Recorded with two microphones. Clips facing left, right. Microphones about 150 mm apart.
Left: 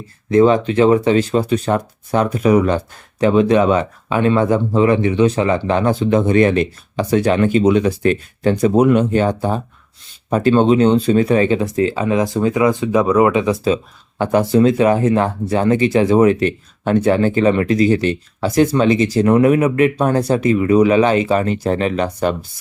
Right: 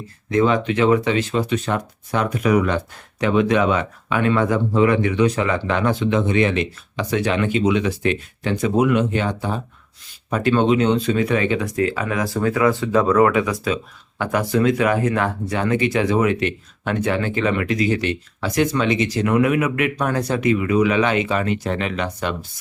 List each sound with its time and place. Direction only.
0.3 s speech: 35° left (ahead or behind)